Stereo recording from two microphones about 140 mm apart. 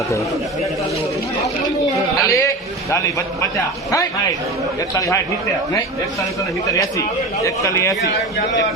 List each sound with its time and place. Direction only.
2.2 s speech: 20° left (ahead or behind)
4.9 s speech: 20° left (ahead or behind)
7.4 s speech: 20° left (ahead or behind)